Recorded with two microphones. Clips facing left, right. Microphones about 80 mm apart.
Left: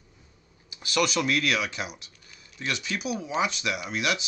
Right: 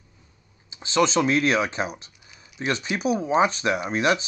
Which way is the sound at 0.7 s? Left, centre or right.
Right.